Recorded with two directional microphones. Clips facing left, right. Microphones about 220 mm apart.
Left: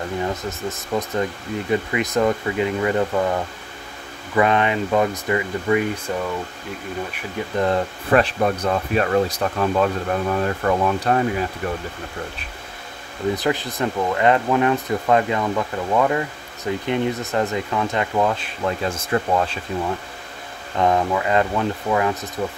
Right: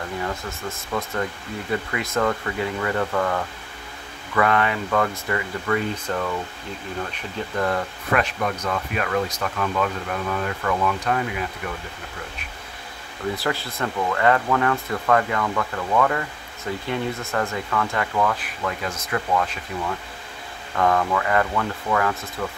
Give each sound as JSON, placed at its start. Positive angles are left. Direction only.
{"t": 0.2, "sound": "speech", "side_deg": 20}
{"t": 7.5, "sound": "speech", "side_deg": 25}
{"t": 13.3, "sound": "speech", "side_deg": 20}
{"t": 20.7, "sound": "speech", "side_deg": 20}